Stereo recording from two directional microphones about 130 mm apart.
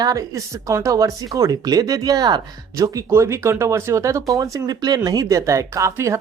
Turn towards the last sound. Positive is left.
turn(degrees=-25)  # may be behind; listen again after turning